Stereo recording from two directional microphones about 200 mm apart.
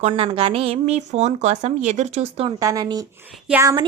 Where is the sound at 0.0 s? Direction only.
30° right (ahead or behind).